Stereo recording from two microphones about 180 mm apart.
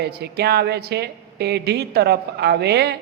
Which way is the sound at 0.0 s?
65° right (ahead or behind).